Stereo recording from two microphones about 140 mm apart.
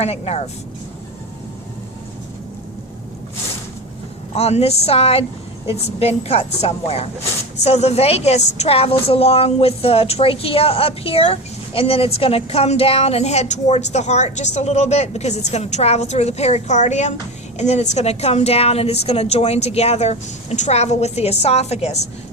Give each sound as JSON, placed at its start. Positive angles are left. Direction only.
{"t": 0.0, "sound": "a woman's voice", "side_deg": 50}
{"t": 4.4, "sound": "a woman's voice", "side_deg": 45}